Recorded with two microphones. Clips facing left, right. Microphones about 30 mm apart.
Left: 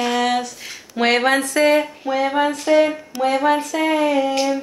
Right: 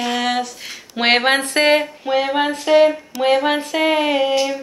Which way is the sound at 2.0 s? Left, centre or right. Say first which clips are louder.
Right 1 dB; right.